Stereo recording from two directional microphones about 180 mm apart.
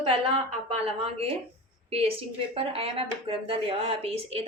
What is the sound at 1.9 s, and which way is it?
Speech, 30° right (ahead or behind).